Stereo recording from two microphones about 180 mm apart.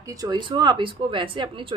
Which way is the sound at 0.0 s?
20° right (ahead or behind).